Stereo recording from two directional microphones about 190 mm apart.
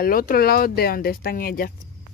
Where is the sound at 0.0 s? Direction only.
50° left (ahead or behind).